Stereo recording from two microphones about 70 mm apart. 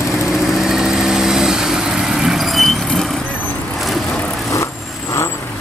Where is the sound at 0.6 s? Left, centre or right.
Centre.